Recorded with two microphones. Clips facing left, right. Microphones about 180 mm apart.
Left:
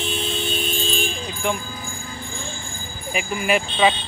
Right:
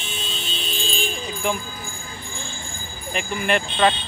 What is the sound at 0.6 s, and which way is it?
Vehicle, 50° left (ahead or behind).